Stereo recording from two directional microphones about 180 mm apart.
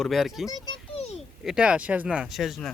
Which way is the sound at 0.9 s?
35° left (ahead or behind).